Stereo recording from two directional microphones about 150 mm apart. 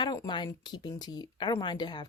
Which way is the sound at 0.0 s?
30° left (ahead or behind).